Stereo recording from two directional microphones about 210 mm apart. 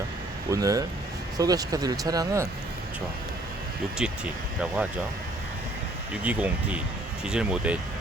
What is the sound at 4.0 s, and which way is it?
Speech, 5° right (ahead or behind).